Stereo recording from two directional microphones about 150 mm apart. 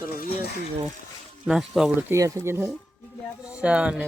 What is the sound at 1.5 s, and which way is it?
Speech, 5° right (ahead or behind).